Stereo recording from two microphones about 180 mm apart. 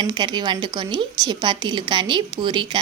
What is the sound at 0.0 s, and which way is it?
A woman's voice, 25° right (ahead or behind).